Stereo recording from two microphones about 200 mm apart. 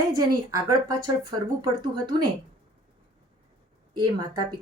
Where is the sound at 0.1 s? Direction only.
15° right (ahead or behind).